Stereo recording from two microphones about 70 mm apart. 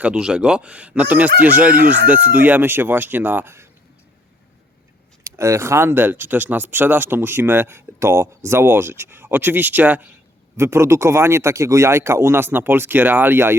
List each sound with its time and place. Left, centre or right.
0.0 s speech: centre; by 3.7 s right
5.2 s speech: right
10.6 s speech: right